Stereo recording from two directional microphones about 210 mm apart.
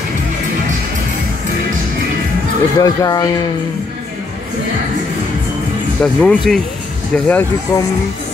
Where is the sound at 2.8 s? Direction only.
15° left (ahead or behind).